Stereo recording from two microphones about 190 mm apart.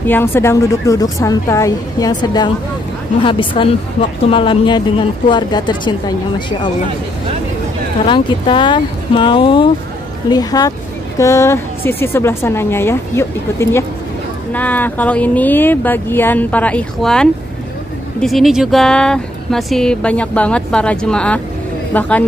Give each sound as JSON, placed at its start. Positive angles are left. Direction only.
{"t": 0.0, "sound": "speech", "side_deg": 10}
{"t": 8.1, "sound": "speech", "side_deg": 25}